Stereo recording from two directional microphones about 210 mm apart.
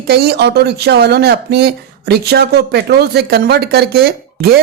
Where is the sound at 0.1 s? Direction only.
50° right (ahead or behind).